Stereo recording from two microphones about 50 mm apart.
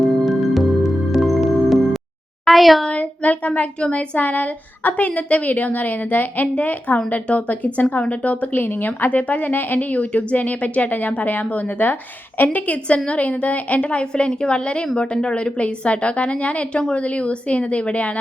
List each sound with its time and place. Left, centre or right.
0.0 s music: centre
2.5 s a woman's voice: centre
2.9 s speech: left
4.2 s a woman's voice: left